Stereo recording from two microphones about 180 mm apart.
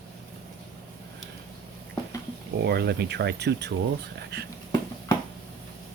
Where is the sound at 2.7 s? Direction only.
65° right (ahead or behind).